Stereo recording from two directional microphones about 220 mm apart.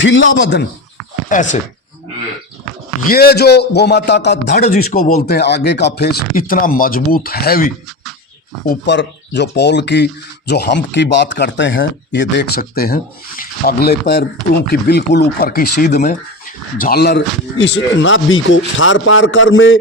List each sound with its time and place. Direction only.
0.0 s a man's voice: 60° left (ahead or behind)
1.3 s speech: 35° left (ahead or behind)
2.7 s a sound: centre (ahead or behind)
3.1 s a man's voice: 45° left (ahead or behind); by 19.8 s 60° left (ahead or behind)